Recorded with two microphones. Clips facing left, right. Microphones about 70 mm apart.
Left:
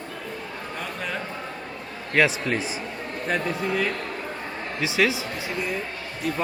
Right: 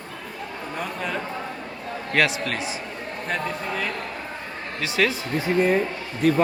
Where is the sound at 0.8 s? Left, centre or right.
Centre.